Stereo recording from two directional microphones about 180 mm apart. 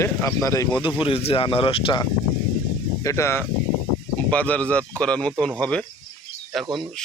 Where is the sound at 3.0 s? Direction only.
15° left (ahead or behind).